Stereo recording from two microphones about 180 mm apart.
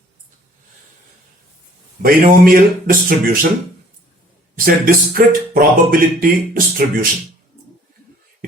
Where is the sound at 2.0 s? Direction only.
55° right (ahead or behind).